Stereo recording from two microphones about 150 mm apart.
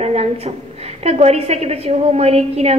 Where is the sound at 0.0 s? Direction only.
45° right (ahead or behind).